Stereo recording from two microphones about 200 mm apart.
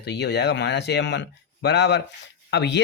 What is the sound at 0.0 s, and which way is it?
Speech, 55° left (ahead or behind).